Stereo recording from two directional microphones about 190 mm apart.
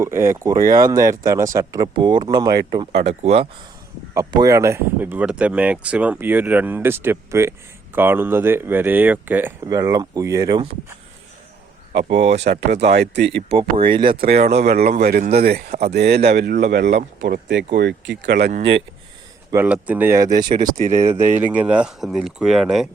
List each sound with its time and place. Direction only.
0.0 s speech: 15° right (ahead or behind)
2.9 s speech: 35° right (ahead or behind)
4.1 s speech: 20° right (ahead or behind)
12.0 s speech: 35° right (ahead or behind)
12.5 s speech: 60° right (ahead or behind)
13.5 s speech: 30° right (ahead or behind)
14.2 s speech: 55° right (ahead or behind)
14.4 s speech: 35° right (ahead or behind)
15.1 s speech: 55° right (ahead or behind)
19.5 s speech: 10° right (ahead or behind)
20.7 s speech: 35° right (ahead or behind)
21.3 s speech: 10° right (ahead or behind)